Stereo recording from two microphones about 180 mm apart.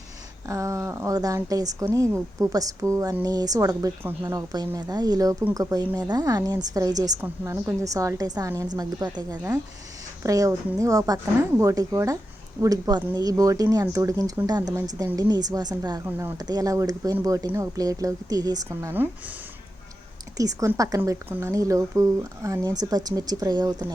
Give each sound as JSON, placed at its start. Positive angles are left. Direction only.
{"t": 0.4, "sound": "a woman's voice", "side_deg": -15}
{"t": 20.3, "sound": "a woman's voice", "side_deg": -20}